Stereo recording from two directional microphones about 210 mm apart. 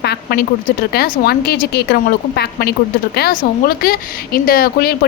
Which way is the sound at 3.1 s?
45° left (ahead or behind).